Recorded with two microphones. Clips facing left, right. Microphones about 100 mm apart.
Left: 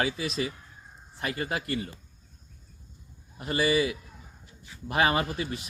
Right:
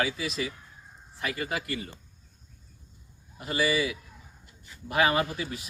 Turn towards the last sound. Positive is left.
turn(degrees=30)  # may be behind; listen again after turning